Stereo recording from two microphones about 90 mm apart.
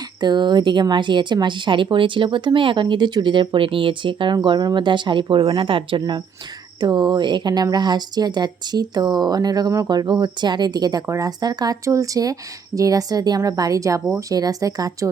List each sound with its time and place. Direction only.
0.2 s speech: 55° right (ahead or behind); by 6.0 s 75° right (ahead or behind)
6.7 s speech: 55° right (ahead or behind)
11.0 s speech: 35° right (ahead or behind)
11.3 s speech: 45° right (ahead or behind)